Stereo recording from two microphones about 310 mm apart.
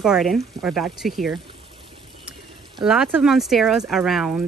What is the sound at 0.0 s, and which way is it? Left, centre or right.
Speech, centre.